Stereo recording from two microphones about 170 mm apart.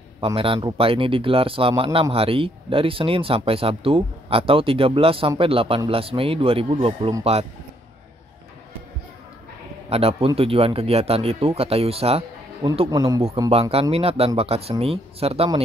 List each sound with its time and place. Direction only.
0.2 s speech: 35° right (ahead or behind)
9.8 s speech: 35° right (ahead or behind)
12.9 s a man's voice: 20° right (ahead or behind)
13.5 s speech: 35° right (ahead or behind)